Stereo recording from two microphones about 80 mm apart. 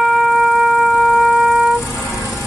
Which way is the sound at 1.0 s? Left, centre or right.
Centre.